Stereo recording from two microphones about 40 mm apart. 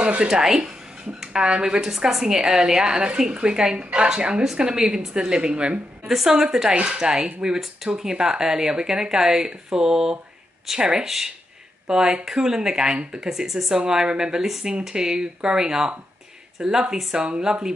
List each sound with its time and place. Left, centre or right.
0.0 s speech: right
0.3 s a woman's voice: centre
1.8 s a woman's voice: centre
6.0 s a woman's voice: centre
11.1 s a woman's voice: centre
13.5 s a woman's voice: centre